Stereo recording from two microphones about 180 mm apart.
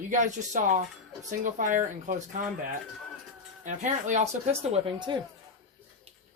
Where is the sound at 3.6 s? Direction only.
40° right (ahead or behind).